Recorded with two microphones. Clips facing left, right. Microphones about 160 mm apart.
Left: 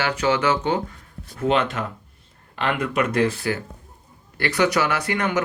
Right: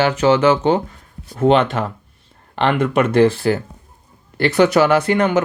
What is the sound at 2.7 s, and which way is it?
Speech, 30° right (ahead or behind).